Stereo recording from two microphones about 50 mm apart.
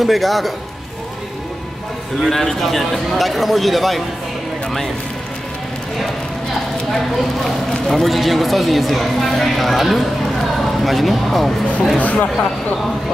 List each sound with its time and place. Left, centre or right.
0.0 s speech: centre
2.2 s speech: centre
6.9 s speech: centre
12.0 s speech: left